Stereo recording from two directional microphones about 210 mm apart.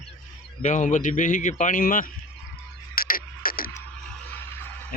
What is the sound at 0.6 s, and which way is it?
A man's voice, 35° left (ahead or behind).